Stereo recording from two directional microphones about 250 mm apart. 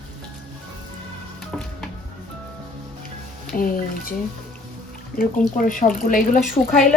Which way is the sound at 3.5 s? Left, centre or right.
Left.